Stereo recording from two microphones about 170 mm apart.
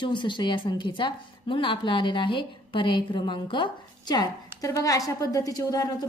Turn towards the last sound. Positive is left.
turn(degrees=20)  # may be behind; listen again after turning